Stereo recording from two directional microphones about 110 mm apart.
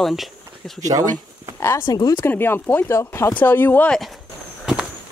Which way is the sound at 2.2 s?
20° left (ahead or behind).